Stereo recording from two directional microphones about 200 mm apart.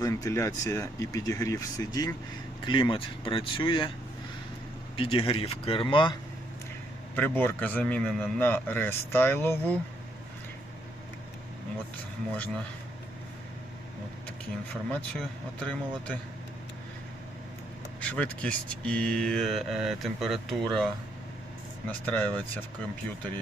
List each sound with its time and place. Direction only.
0.0 s a man's voice: 15° left (ahead or behind)
4.9 s speech: 25° left (ahead or behind)
7.2 s a man's voice: 10° left (ahead or behind)
12.3 s a man's voice: 5° left (ahead or behind)
14.8 s speech: 5° left (ahead or behind)
18.0 s a man's voice: 5° left (ahead or behind)